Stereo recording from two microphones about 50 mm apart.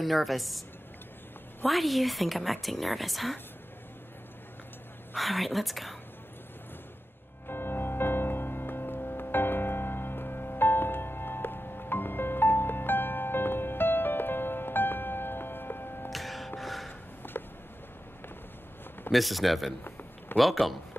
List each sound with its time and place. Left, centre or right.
0.0 s a woman's voice: centre
5.1 s a woman's voice: centre
7.4 s music: left
16.1 s gasp: centre
17.2 s a sound: left
19.1 s a woman's voice: centre